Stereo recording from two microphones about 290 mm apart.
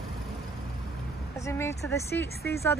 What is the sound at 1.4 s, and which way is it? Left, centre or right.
Speech, centre.